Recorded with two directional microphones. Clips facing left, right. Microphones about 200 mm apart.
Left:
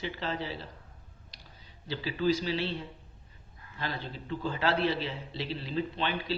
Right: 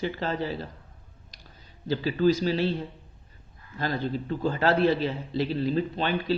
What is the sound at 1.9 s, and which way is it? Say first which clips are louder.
Speech: right 6 dB; 45° right (ahead or behind).